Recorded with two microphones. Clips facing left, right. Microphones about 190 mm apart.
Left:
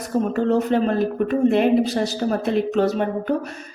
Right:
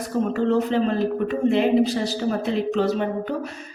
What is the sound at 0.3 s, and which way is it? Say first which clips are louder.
Speech: left 1 dB; 50° left (ahead or behind).